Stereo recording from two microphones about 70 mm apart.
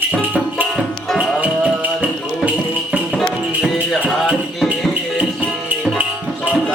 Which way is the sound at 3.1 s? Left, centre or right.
Centre.